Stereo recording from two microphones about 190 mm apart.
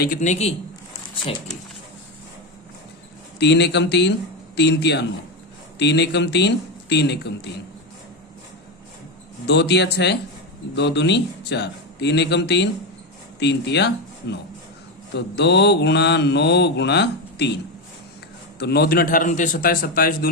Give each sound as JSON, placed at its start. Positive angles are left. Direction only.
{"t": 0.0, "sound": "speech", "side_deg": 45}
{"t": 3.3, "sound": "mantra", "side_deg": 65}
{"t": 9.5, "sound": "mantra", "side_deg": 60}
{"t": 18.6, "sound": "a man's voice", "side_deg": 60}